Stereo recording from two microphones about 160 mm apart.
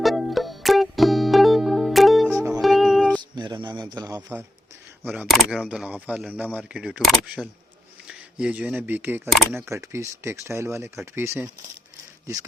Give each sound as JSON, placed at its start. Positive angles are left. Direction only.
{"t": 0.0, "sound": "music", "side_deg": 0}
{"t": 3.3, "sound": "a sound", "side_deg": -30}
{"t": 5.0, "sound": "speech", "side_deg": -10}